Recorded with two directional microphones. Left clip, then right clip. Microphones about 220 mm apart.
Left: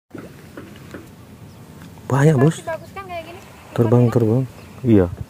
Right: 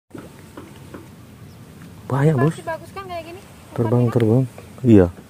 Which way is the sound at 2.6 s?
45° right (ahead or behind).